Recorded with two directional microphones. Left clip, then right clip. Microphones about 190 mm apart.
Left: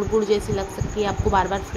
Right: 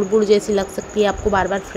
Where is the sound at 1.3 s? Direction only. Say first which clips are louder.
Right 3 dB; 10° right (ahead or behind).